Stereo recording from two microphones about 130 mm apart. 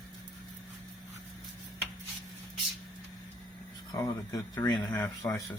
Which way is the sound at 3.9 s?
30° left (ahead or behind).